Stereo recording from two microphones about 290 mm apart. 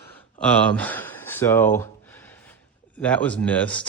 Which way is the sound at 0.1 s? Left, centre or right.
Centre.